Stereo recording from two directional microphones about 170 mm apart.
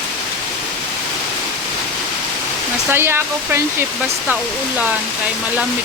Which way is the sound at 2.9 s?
15° right (ahead or behind).